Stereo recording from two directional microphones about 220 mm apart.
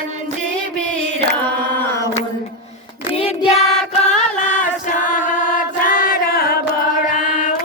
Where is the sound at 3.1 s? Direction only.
30° left (ahead or behind).